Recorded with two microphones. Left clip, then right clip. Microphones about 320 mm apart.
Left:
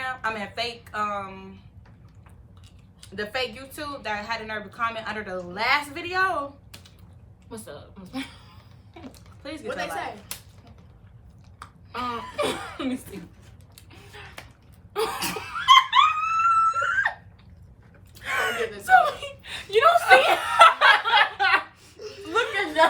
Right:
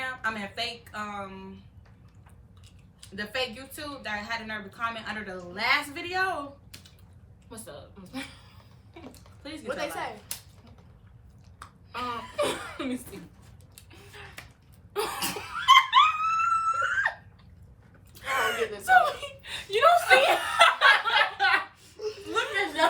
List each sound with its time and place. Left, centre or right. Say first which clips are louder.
0.0 s speech: left 3 dB; centre
3.2 s speech: left 3 dB; centre
9.0 s a sound: left 3 dB; centre
9.6 s speech: left 2 dB; centre
11.6 s speech: left 3 dB; centre
13.7 s music: left 2 dB; centre
14.9 s dog: left 4 dB; centre
18.1 s gasp: left 1 dB; centre
20.1 s snicker: left 3 dB; centre
20.5 s a sound: left 6 dB; centre
21.9 s a sound: right 4 dB; centre
22.3 s a sound: left 4 dB; centre